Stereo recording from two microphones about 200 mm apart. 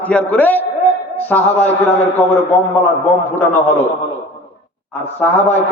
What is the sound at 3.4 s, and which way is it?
Speech, 10° left (ahead or behind).